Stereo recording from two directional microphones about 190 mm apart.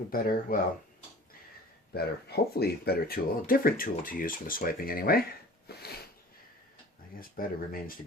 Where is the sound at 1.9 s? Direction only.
55° left (ahead or behind).